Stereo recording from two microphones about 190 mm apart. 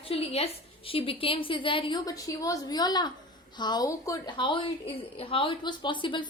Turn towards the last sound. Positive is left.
turn(degrees=25)  # may be behind; listen again after turning